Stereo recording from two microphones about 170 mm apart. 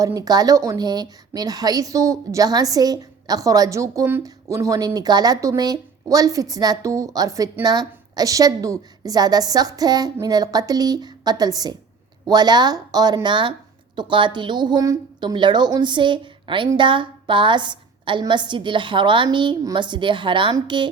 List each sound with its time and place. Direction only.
0.0 s a woman's voice: 20° right (ahead or behind)